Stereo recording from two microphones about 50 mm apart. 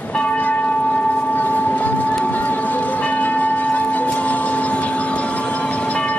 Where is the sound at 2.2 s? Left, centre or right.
Left.